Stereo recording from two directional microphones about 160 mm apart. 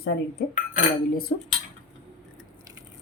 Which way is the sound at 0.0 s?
85° left.